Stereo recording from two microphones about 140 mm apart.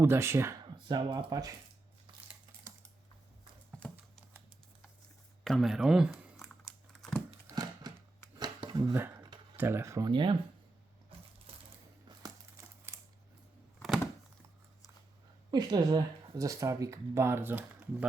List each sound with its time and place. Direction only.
0.0 s speech: 20° right (ahead or behind)
0.6 s speech: 30° right (ahead or behind)
3.8 s a sound: 10° left (ahead or behind)
5.4 s crumpling: centre (ahead or behind)
7.4 s a sound: 25° right (ahead or behind)
9.0 s speech: 15° right (ahead or behind)
10.1 s speech: 35° right (ahead or behind)
15.4 s speech: 30° right (ahead or behind); by 18.1 s 10° right (ahead or behind)